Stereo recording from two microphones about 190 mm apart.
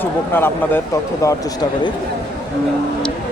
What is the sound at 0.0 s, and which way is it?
Speech, 10° left (ahead or behind).